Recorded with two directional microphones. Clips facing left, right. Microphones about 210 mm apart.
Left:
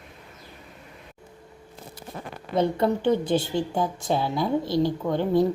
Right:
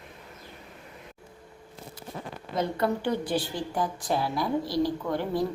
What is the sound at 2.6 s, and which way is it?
A woman's voice, 25° left (ahead or behind).